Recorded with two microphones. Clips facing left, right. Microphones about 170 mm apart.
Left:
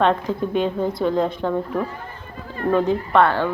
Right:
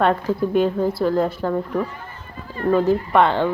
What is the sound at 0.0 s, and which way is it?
Speech, 5° right (ahead or behind).